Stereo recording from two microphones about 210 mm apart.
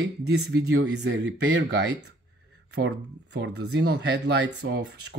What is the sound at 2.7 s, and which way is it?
Speech, 55° right (ahead or behind).